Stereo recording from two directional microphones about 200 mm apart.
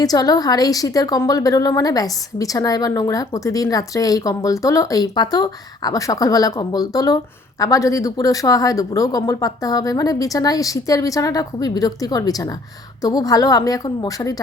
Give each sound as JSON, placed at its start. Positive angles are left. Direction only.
{"t": 0.0, "sound": "a woman's voice", "side_deg": 20}